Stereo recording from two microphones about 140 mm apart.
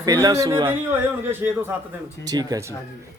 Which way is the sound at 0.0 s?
25° right (ahead or behind).